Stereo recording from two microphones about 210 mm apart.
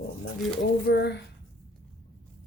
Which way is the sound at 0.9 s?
50° left (ahead or behind).